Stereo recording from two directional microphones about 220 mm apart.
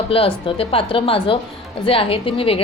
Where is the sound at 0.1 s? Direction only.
25° left (ahead or behind).